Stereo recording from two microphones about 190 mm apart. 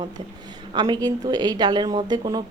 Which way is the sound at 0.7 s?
20° right (ahead or behind).